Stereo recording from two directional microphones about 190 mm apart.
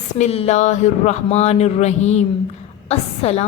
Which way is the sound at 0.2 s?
35° left (ahead or behind).